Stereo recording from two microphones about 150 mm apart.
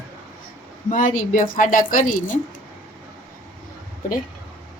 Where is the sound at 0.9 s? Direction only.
60° left (ahead or behind).